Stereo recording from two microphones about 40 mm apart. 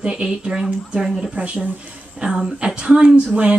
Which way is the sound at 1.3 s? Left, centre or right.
Right.